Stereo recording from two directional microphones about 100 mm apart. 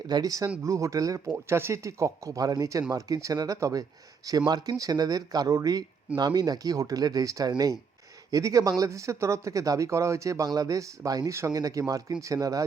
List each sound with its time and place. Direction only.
0.1 s speech: 40° right (ahead or behind)
1.3 s speech: 25° right (ahead or behind)